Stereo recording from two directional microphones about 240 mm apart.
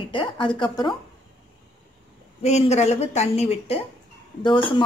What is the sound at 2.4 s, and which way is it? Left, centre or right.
A woman's voice, left.